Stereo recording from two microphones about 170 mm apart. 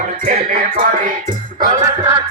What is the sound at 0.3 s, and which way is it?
Music, 55° right (ahead or behind).